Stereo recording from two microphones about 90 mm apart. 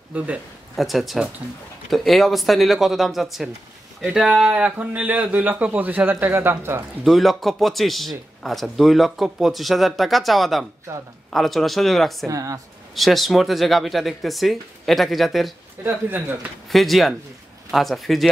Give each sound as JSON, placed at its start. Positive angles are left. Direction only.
{"t": 0.7, "sound": "a man's voice", "side_deg": 0}
{"t": 7.1, "sound": "a man's voice", "side_deg": 0}
{"t": 12.3, "sound": "speech", "side_deg": -40}
{"t": 12.9, "sound": "a man's voice", "side_deg": 0}
{"t": 15.8, "sound": "speech", "side_deg": -20}
{"t": 16.7, "sound": "a man's voice", "side_deg": 0}